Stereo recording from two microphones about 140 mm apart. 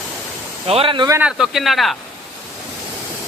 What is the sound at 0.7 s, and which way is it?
Speech, 40° right (ahead or behind).